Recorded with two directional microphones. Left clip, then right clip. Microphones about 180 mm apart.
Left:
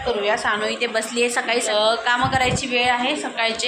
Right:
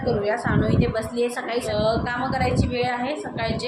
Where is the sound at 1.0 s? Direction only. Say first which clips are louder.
Left 4 dB; 10° left (ahead or behind).